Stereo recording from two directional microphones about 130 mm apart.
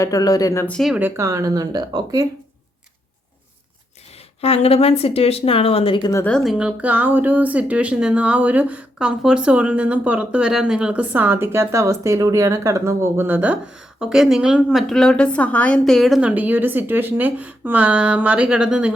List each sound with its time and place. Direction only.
0.0 s speech: 25° left (ahead or behind)
0.7 s a woman's voice: centre (ahead or behind)
0.9 s speech: 15° right (ahead or behind)
4.4 s speech: 50° left (ahead or behind)
6.2 s a woman's voice: 5° left (ahead or behind)
15.8 s a woman's voice: centre (ahead or behind)
16.3 s speech: 15° right (ahead or behind)